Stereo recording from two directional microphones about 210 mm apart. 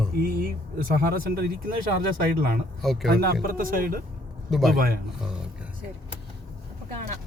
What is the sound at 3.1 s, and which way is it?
Speech, 45° right (ahead or behind).